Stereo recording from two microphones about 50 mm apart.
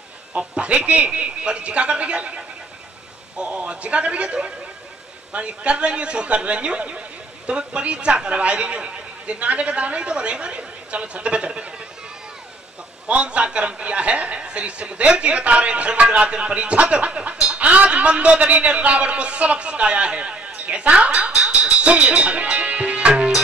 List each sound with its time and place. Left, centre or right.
0.4 s a man's voice: right
13.0 s a man's voice: right